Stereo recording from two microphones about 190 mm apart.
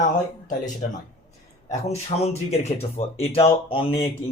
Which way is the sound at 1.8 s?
35° left (ahead or behind).